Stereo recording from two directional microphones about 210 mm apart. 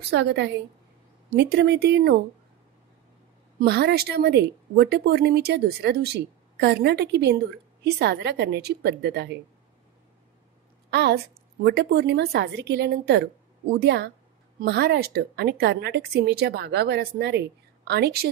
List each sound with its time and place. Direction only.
0.1 s a woman's voice: 55° right (ahead or behind)
3.5 s a woman's voice: 50° right (ahead or behind)
10.9 s a woman's voice: 55° right (ahead or behind)